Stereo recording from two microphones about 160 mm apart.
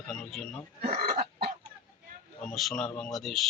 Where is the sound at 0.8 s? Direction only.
65° right (ahead or behind).